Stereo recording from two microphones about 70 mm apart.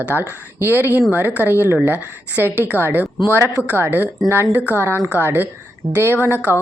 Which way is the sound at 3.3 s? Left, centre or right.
Right.